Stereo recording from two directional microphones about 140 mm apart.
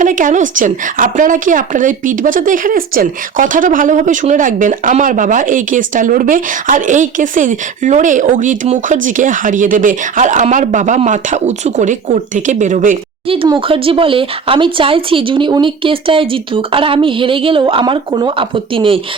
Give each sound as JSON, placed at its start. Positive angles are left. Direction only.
{"t": 0.0, "sound": "speech", "side_deg": -65}
{"t": 13.2, "sound": "speech", "side_deg": -40}